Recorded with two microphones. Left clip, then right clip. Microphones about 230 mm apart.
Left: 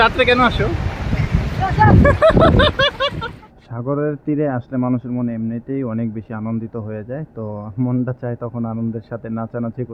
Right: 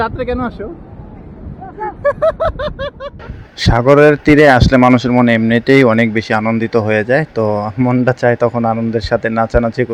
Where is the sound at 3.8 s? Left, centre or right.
Right.